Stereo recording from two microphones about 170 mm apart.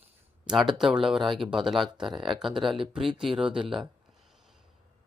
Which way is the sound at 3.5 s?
30° right (ahead or behind).